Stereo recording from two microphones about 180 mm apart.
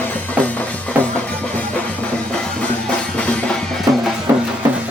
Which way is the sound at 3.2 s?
5° left (ahead or behind).